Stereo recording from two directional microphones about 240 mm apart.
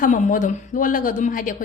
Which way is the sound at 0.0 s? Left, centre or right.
Left.